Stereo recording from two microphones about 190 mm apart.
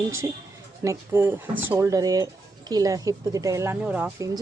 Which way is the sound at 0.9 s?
10° right (ahead or behind).